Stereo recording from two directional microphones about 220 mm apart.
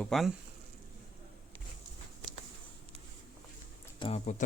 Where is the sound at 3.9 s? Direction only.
25° left (ahead or behind).